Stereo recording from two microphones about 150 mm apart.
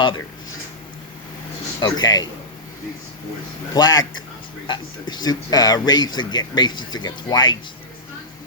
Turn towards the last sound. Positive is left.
turn(degrees=30)  # may be behind; listen again after turning